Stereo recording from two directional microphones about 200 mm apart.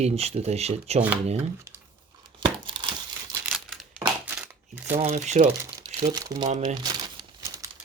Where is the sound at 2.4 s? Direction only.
25° right (ahead or behind).